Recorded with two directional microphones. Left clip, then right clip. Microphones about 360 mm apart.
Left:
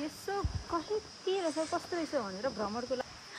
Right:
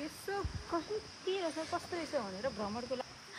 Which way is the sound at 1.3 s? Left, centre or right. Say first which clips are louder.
Left 4 dB; left.